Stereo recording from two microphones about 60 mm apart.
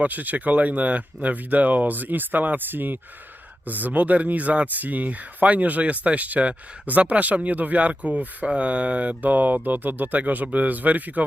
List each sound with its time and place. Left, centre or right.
0.0 s speech: right